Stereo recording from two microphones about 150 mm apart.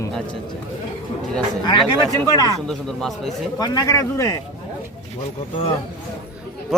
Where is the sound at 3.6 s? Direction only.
25° left (ahead or behind).